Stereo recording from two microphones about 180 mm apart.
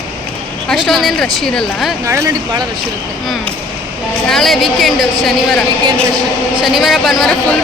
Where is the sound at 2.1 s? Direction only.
15° right (ahead or behind).